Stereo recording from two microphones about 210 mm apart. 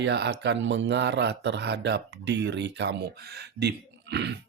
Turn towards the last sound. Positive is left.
turn(degrees=-55)  # may be behind; listen again after turning